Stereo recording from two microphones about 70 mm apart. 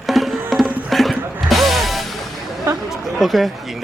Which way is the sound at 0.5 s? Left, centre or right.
Centre.